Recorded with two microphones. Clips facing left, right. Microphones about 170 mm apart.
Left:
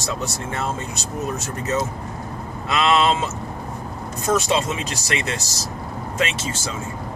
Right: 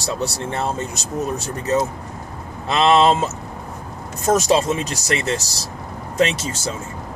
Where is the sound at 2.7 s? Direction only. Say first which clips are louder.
Right 4 dB; 30° right (ahead or behind).